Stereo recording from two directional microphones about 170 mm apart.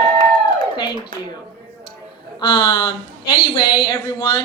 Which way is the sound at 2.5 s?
25° left (ahead or behind).